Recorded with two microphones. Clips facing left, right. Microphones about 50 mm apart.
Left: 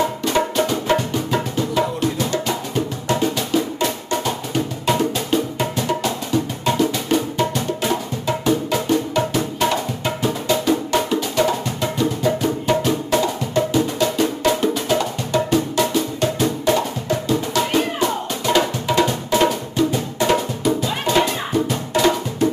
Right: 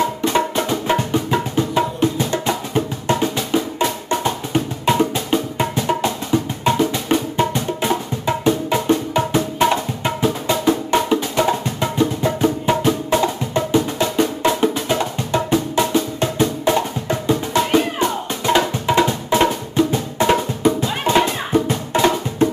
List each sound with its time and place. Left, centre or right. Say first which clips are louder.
0.2 s music: even; centre